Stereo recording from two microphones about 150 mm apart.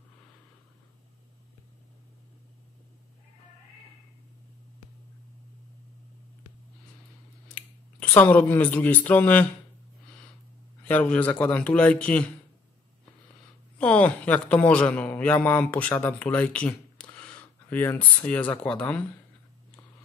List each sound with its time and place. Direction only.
7.5 s speech: 10° left (ahead or behind)
10.8 s a man's voice: 10° left (ahead or behind)
13.7 s a man's voice: 10° left (ahead or behind)